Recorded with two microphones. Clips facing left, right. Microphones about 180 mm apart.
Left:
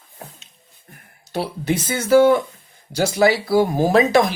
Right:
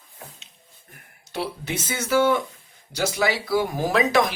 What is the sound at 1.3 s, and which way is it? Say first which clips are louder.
Speech: left 6 dB; 35° left (ahead or behind).